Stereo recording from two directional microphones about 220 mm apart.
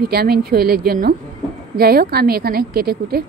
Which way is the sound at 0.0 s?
45° right (ahead or behind).